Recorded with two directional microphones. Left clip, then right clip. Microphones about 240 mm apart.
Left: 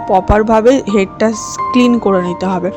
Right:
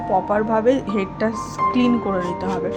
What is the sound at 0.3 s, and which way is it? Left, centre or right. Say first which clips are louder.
Speech: left 9 dB; left.